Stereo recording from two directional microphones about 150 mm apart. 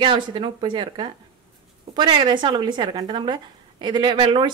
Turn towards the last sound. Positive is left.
turn(degrees=-30)  # may be behind; listen again after turning